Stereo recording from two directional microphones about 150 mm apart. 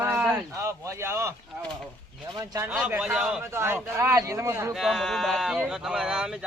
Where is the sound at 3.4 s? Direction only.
15° right (ahead or behind).